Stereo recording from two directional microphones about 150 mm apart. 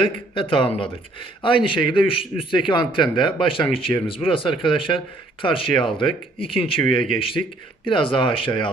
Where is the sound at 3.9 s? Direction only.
20° left (ahead or behind).